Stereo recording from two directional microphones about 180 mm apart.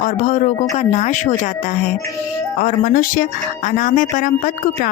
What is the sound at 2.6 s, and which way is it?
Speech, 50° left (ahead or behind).